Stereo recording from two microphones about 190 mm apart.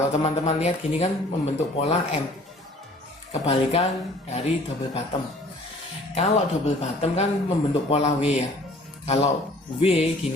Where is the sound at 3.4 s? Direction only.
30° left (ahead or behind).